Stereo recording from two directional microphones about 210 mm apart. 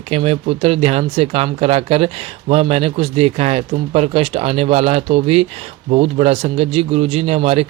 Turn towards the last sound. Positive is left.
turn(degrees=-30)  # may be behind; listen again after turning